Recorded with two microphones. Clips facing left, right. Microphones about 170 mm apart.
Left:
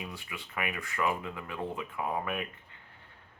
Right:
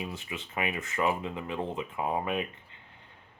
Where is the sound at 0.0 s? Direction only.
25° right (ahead or behind).